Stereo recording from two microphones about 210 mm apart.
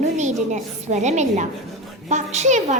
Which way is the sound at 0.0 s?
35° right (ahead or behind).